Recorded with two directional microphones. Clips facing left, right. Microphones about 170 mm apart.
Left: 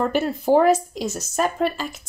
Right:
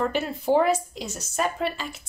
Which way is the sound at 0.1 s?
45° left (ahead or behind).